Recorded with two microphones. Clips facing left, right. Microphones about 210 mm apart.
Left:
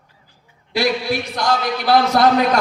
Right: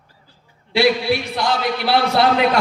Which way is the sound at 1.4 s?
45° left (ahead or behind).